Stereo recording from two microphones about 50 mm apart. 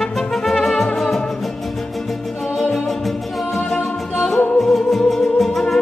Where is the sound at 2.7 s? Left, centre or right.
Centre.